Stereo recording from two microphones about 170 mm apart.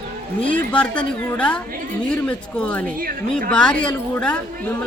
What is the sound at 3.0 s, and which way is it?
Speech, 60° right (ahead or behind).